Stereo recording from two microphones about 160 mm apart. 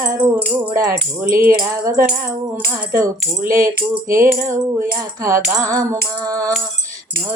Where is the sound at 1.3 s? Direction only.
60° right (ahead or behind).